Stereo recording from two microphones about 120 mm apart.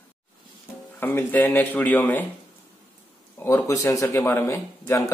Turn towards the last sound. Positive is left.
turn(degrees=20)  # may be behind; listen again after turning